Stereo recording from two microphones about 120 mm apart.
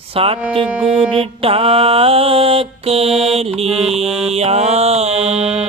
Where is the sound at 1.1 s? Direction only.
50° right (ahead or behind).